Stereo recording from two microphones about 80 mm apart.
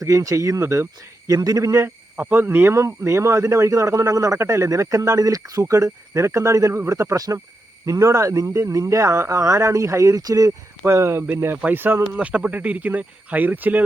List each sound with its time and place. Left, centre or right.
0.0 s speech: right
1.3 s speech: right
2.1 s speech: right
10.8 s speech: right